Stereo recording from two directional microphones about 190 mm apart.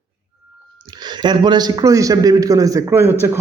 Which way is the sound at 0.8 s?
20° right (ahead or behind).